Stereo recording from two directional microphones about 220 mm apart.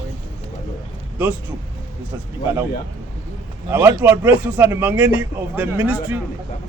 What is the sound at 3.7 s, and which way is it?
Speech, 10° right (ahead or behind).